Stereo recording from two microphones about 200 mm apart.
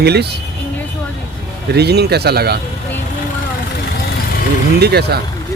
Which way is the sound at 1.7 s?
55° right (ahead or behind).